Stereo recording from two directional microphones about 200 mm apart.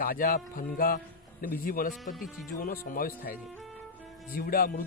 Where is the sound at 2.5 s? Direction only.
45° left (ahead or behind).